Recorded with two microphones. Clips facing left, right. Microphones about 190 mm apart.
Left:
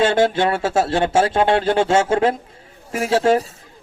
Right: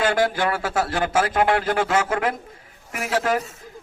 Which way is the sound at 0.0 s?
25° left (ahead or behind).